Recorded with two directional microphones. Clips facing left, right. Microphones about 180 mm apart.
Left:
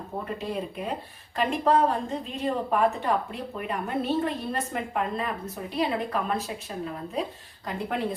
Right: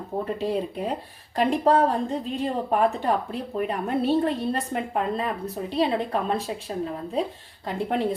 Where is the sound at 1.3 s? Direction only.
35° right (ahead or behind).